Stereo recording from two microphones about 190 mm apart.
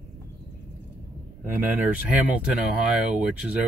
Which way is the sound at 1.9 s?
5° right (ahead or behind).